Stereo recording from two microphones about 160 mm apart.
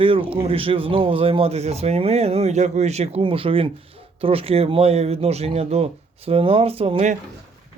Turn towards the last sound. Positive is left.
turn(degrees=-45)  # may be behind; listen again after turning